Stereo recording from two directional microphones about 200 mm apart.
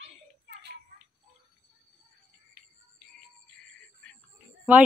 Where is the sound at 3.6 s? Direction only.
5° left (ahead or behind).